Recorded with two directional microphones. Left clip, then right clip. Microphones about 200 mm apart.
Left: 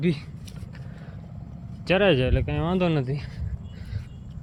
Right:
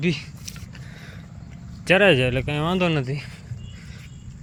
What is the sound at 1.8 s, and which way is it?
Speech, 5° right (ahead or behind).